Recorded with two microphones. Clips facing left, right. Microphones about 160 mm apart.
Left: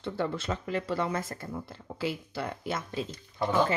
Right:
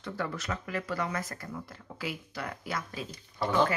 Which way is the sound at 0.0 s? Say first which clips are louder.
Left 4 dB; 25° left (ahead or behind).